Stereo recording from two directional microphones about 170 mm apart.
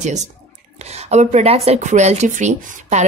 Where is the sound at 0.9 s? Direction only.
40° right (ahead or behind).